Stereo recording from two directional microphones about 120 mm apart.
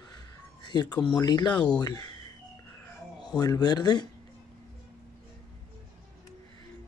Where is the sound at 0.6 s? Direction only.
40° left (ahead or behind).